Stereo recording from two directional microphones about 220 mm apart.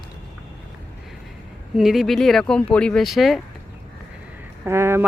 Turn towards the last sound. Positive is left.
turn(degrees=-10)  # may be behind; listen again after turning